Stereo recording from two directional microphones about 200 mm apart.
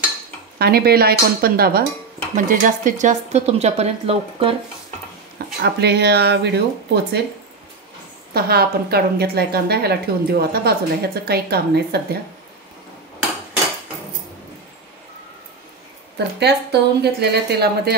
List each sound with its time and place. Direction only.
0.6 s a woman's voice: 50° right (ahead or behind); by 4.6 s 30° right (ahead or behind)
5.6 s speech: 55° right (ahead or behind)
8.3 s a woman's voice: 50° right (ahead or behind)
16.3 s speech: 55° right (ahead or behind)